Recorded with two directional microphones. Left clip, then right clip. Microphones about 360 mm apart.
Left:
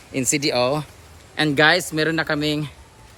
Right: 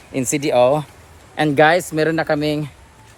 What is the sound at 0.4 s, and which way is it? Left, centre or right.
Speech, centre.